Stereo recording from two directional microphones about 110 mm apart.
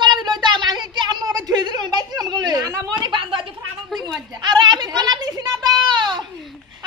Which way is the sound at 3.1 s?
50° right (ahead or behind).